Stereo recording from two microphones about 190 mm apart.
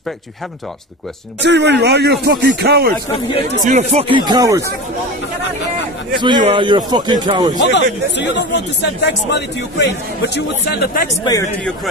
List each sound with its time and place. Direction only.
1.4 s speech: 65° right (ahead or behind)
3.6 s speech: 35° right (ahead or behind); by 4.6 s 20° right (ahead or behind)
6.4 s speech: 25° right (ahead or behind)
7.5 s speech: 65° left (ahead or behind)
11.1 s speech: 20° left (ahead or behind)